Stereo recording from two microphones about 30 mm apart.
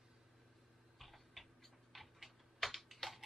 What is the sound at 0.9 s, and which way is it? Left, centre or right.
Tick-tock, centre.